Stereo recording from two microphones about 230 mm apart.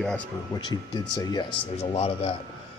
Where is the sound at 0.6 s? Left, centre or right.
Centre.